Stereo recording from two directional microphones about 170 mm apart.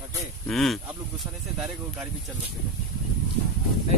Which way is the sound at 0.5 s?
Centre (ahead or behind).